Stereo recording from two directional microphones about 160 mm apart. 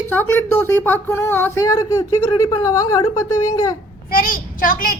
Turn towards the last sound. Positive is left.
turn(degrees=60)  # may be behind; listen again after turning